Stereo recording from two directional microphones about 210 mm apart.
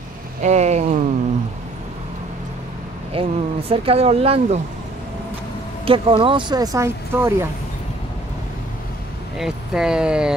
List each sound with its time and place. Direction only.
0.4 s vehicle: 35° right (ahead or behind)
3.1 s speech: 25° right (ahead or behind)
5.9 s speech: 25° right (ahead or behind)
9.4 s speech: 5° right (ahead or behind)